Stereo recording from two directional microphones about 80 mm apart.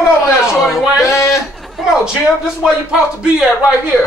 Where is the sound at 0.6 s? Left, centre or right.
Centre.